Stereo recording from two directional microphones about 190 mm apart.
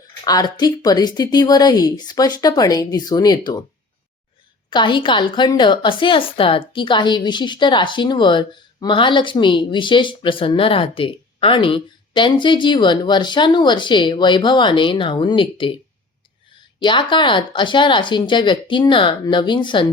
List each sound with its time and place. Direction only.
0.3 s a woman's voice: 20° left (ahead or behind)
4.7 s a woman's voice: 25° left (ahead or behind)
16.8 s a woman's voice: 25° left (ahead or behind)